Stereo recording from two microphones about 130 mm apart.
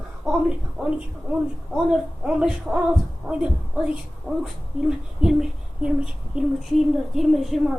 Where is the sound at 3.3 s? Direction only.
15° right (ahead or behind).